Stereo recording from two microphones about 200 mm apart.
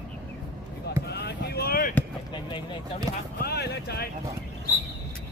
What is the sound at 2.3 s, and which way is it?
Speech, 25° left (ahead or behind).